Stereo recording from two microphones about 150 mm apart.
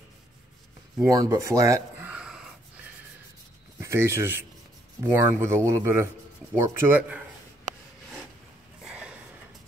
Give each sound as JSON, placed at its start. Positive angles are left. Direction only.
{"t": 1.0, "sound": "speech", "side_deg": -25}
{"t": 2.0, "sound": "wheeze", "side_deg": -5}
{"t": 3.8, "sound": "speech", "side_deg": -15}
{"t": 8.8, "sound": "a sound", "side_deg": -5}